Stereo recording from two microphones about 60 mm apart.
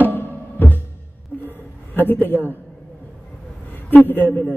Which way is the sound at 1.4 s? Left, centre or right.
Left.